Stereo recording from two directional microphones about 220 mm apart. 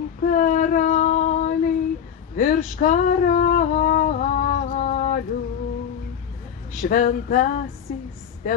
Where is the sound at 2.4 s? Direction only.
40° left (ahead or behind).